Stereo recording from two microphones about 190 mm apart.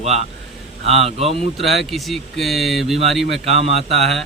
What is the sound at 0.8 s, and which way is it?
Speech, 35° right (ahead or behind).